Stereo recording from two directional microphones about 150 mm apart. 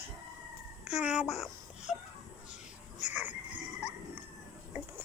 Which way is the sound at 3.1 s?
10° right (ahead or behind).